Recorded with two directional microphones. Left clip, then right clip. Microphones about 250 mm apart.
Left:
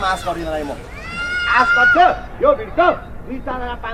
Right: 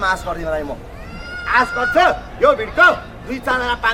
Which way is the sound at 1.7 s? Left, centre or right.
Centre.